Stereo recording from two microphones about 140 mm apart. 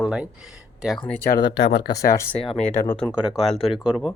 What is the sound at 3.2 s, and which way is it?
Speech, 5° right (ahead or behind).